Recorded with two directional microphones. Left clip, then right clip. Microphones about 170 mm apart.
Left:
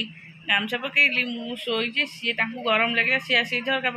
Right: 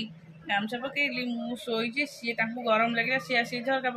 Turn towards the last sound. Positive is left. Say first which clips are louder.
# left 4 dB
turn(degrees=0)  # may be behind; listen again after turning